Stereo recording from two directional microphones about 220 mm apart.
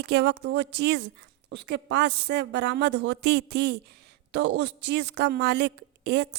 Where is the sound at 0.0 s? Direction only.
50° right (ahead or behind).